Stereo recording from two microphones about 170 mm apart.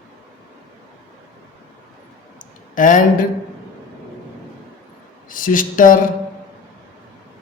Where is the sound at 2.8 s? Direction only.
50° left (ahead or behind).